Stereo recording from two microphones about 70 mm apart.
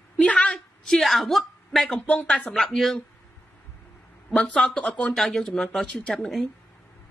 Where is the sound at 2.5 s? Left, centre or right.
Centre.